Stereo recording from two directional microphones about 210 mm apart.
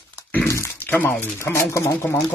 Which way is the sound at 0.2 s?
10° left (ahead or behind).